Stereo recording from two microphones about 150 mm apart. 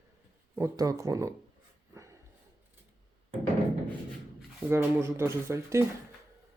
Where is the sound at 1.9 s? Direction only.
20° right (ahead or behind).